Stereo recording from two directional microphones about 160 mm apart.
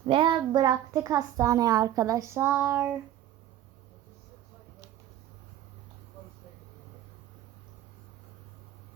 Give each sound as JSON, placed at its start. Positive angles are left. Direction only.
{"t": 0.1, "sound": "a child's voice", "side_deg": -30}